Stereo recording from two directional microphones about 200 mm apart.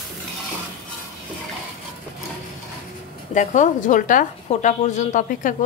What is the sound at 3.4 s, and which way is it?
A woman's voice, 40° left (ahead or behind).